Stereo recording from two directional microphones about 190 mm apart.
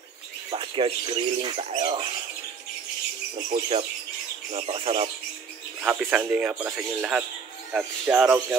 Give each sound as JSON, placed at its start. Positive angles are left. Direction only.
{"t": 0.5, "sound": "speech", "side_deg": -25}
{"t": 3.5, "sound": "speech", "side_deg": -30}
{"t": 5.8, "sound": "speech", "side_deg": -5}